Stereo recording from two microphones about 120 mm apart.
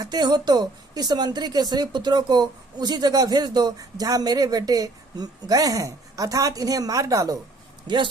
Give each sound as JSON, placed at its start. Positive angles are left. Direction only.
{"t": 0.0, "sound": "speech", "side_deg": -35}
{"t": 7.9, "sound": "speech", "side_deg": -40}